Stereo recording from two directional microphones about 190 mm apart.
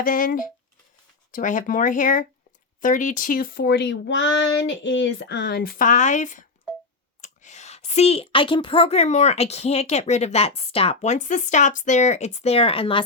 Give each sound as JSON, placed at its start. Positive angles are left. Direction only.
{"t": 0.0, "sound": "a woman's voice", "side_deg": 45}